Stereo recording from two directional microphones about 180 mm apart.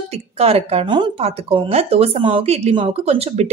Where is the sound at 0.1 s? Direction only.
35° right (ahead or behind).